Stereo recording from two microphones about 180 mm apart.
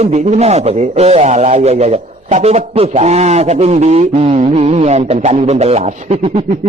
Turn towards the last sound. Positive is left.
turn(degrees=-35)  # may be behind; listen again after turning